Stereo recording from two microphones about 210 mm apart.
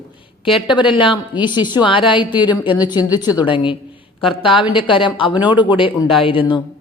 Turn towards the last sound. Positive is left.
turn(degrees=25)  # may be behind; listen again after turning